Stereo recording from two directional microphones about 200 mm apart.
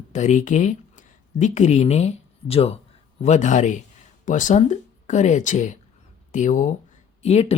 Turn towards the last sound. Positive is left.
turn(degrees=30)  # may be behind; listen again after turning